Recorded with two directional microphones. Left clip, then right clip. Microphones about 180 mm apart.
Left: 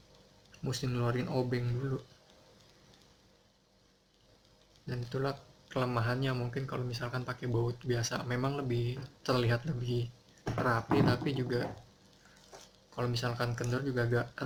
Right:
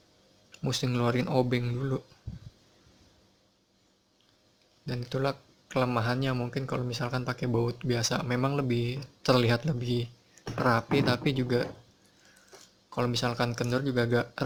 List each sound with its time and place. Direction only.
0.5 s speech: 45° right (ahead or behind)
4.9 s speech: 45° right (ahead or behind)
13.0 s speech: 50° right (ahead or behind)